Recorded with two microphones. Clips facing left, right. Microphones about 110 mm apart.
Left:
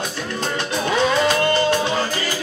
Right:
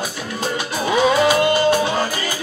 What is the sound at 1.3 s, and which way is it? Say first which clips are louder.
Music: right 2 dB; 10° right (ahead or behind).